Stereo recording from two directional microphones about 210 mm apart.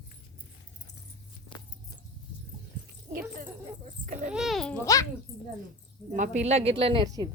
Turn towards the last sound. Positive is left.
turn(degrees=-20)  # may be behind; listen again after turning